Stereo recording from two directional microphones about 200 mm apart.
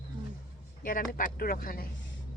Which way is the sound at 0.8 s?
45° left (ahead or behind).